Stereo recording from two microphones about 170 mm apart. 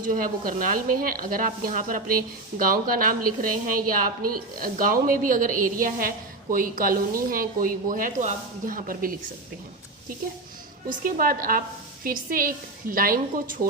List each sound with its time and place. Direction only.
0.0 s speech: 55° right (ahead or behind)
10.8 s speech: 55° right (ahead or behind)